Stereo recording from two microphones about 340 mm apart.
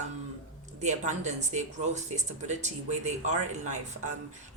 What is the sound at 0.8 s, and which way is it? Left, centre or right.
Speech, right.